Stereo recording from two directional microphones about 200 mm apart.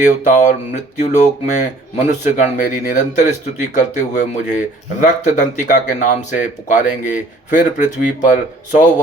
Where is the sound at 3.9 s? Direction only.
40° left (ahead or behind).